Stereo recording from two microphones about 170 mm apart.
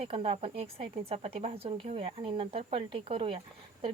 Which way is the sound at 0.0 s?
35° right (ahead or behind).